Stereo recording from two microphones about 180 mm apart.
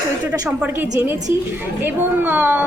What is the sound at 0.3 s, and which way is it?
A woman's voice, 5° right (ahead or behind).